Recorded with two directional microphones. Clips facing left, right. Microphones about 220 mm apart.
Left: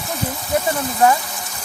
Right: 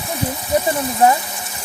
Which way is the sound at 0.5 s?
15° right (ahead or behind).